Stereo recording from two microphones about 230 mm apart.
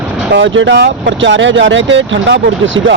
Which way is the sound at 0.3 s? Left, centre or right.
Right.